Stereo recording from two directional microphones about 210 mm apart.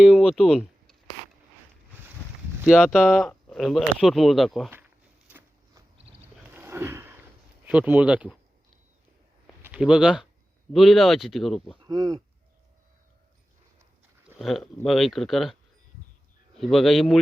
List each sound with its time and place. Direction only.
0.0 s a sound: centre (ahead or behind)
2.8 s speech: centre (ahead or behind)
5.3 s a sound: 10° right (ahead or behind)
7.7 s speech: 5° right (ahead or behind)
9.6 s speech: 5° right (ahead or behind)
11.8 s speech: 20° right (ahead or behind)
14.3 s speech: centre (ahead or behind)
16.6 s speech: centre (ahead or behind)